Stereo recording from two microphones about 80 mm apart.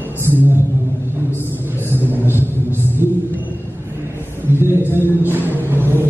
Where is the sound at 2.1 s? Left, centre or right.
Right.